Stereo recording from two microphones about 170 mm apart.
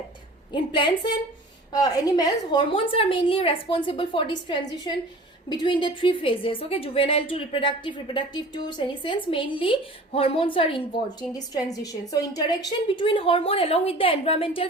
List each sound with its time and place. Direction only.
0.5 s a woman's voice: 30° left (ahead or behind)